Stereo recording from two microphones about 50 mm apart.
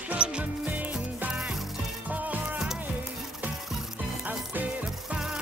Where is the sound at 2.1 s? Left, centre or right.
Right.